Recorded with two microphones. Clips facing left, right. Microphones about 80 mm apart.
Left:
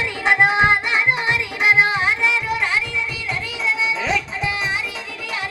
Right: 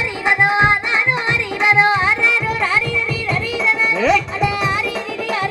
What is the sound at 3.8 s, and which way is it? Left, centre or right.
Music, right.